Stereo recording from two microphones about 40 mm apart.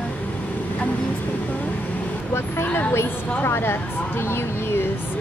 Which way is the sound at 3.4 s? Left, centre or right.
Left.